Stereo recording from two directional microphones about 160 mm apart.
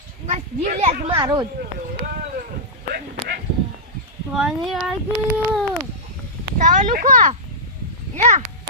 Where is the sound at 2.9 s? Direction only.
75° right (ahead or behind).